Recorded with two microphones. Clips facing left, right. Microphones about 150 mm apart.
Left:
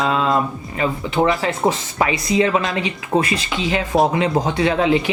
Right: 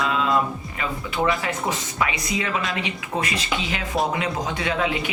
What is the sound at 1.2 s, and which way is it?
Speech, 50° left (ahead or behind).